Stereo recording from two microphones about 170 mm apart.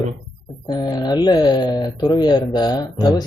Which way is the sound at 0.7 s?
25° left (ahead or behind).